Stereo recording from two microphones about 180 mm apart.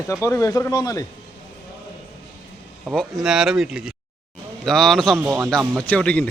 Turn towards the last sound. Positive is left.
turn(degrees=5)  # may be behind; listen again after turning